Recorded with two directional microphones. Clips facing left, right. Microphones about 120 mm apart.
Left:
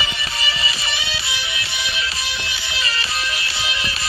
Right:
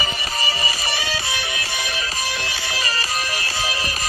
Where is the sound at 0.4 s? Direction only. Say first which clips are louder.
Right 1 dB; 40° right (ahead or behind).